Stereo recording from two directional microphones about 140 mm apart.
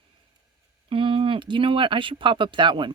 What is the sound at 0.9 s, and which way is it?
Speech, 40° right (ahead or behind).